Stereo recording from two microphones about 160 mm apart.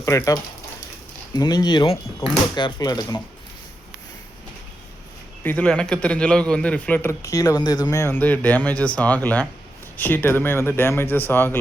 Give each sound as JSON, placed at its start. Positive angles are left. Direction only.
{"t": 0.0, "sound": "speech", "side_deg": 20}
{"t": 5.4, "sound": "a man's voice", "side_deg": 10}